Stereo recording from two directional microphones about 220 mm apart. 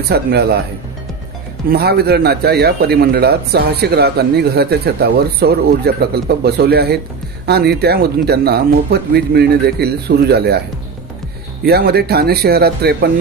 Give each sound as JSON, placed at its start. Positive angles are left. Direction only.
{"t": 0.1, "sound": "a man's voice", "side_deg": -45}
{"t": 1.7, "sound": "a man's voice", "side_deg": -45}
{"t": 11.6, "sound": "a man's voice", "side_deg": -45}